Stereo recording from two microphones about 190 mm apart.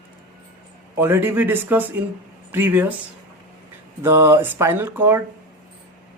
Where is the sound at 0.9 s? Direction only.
10° right (ahead or behind).